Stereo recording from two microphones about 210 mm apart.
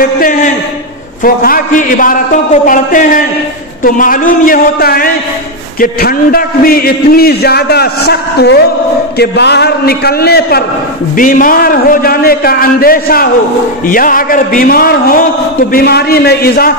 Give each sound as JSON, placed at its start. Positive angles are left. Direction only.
{"t": 0.2, "sound": "a man's voice", "side_deg": 40}